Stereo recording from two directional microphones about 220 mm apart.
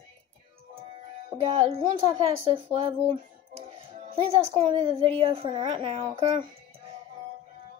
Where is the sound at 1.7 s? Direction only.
25° right (ahead or behind).